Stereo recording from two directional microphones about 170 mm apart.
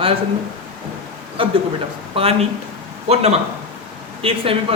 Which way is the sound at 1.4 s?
30° right (ahead or behind).